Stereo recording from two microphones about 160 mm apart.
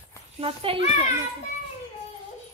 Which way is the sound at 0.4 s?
35° right (ahead or behind).